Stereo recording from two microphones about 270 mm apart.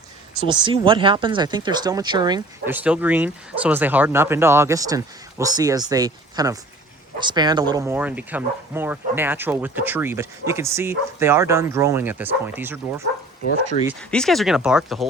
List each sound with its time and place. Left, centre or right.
0.4 s speech: centre
14.1 s speech: centre